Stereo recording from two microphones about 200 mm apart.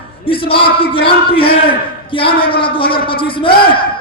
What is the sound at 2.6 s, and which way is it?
Speech, 25° left (ahead or behind).